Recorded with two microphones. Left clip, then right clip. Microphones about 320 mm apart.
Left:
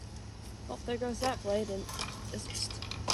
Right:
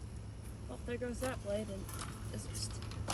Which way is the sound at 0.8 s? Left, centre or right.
Left.